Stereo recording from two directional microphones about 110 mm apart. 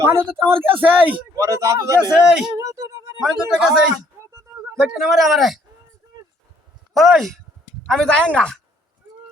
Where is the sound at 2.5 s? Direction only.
30° right (ahead or behind).